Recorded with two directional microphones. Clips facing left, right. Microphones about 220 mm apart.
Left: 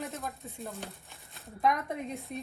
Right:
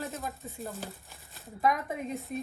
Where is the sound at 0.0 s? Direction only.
Centre (ahead or behind).